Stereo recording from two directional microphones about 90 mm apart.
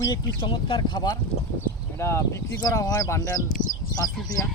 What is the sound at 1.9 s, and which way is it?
Speech, 30° left (ahead or behind).